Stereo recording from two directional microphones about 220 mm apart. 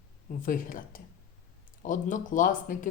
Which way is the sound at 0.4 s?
40° left (ahead or behind).